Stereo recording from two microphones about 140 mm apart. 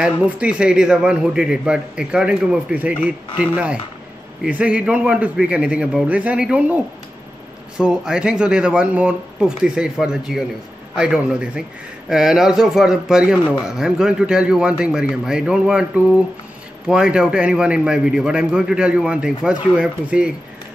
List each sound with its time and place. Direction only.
0.0 s a man's voice: 10° right (ahead or behind)